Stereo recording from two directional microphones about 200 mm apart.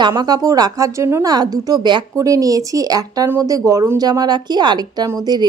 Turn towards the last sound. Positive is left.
turn(degrees=-20)  # may be behind; listen again after turning